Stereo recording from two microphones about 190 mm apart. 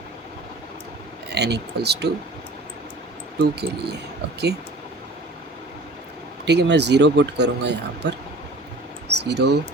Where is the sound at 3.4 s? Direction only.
60° right (ahead or behind).